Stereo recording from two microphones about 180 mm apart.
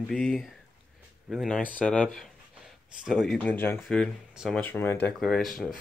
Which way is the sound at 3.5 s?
15° left (ahead or behind).